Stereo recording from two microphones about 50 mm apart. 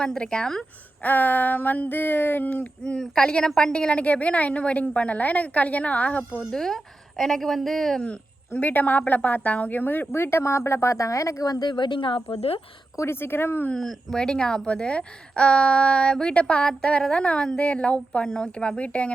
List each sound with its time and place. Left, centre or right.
0.0 s a woman's voice: centre
1.0 s a sound: left
2.8 s a woman's voice: centre
6.5 s a woman's voice: centre
8.0 s a sound: left
8.6 s a sound: left
10.1 s speech: left
13.1 s speech: left
13.7 s a woman's voice: centre
14.2 s a woman's voice: centre